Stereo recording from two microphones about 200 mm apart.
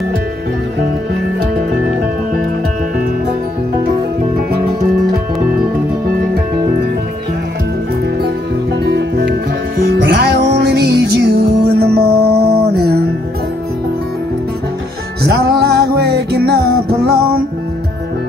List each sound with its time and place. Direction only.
8.8 s music: 55° right (ahead or behind)
15.2 s music: 55° right (ahead or behind)